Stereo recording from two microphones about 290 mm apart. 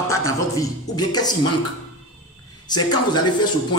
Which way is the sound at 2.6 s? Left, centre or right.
Centre.